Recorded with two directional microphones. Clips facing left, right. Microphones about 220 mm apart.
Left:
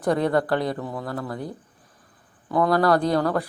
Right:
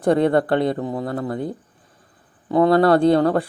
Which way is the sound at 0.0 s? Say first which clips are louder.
Right 5 dB; 25° right (ahead or behind).